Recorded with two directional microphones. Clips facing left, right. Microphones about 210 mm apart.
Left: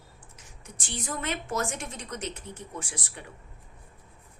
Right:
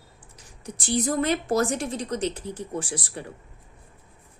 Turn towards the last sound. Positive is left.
turn(degrees=-35)  # may be behind; listen again after turning